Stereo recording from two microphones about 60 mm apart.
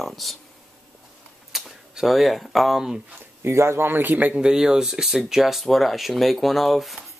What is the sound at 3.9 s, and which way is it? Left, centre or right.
Speech, right.